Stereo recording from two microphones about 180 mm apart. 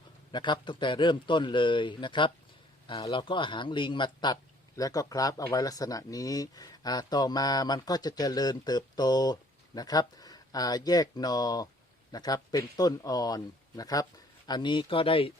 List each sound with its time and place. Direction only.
0.3 s speech: 25° left (ahead or behind)